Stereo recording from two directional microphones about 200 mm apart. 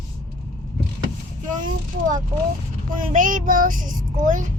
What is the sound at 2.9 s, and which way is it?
Child singing, 40° right (ahead or behind).